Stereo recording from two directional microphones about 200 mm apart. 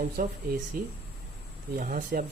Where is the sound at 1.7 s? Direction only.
40° right (ahead or behind).